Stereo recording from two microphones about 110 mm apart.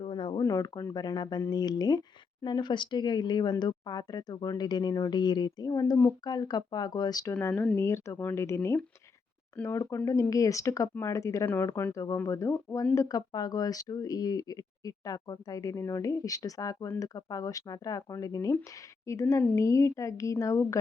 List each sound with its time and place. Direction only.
0.0 s a sound: 50° left (ahead or behind)
0.3 s speech: 35° left (ahead or behind)
7.5 s speech: 15° left (ahead or behind)
7.8 s speech: 25° left (ahead or behind)